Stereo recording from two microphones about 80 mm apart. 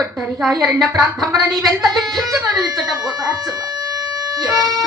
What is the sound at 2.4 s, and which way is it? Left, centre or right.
Speech, right.